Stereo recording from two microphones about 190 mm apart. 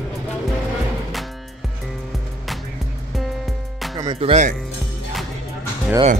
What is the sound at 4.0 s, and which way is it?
Speech, 25° right (ahead or behind).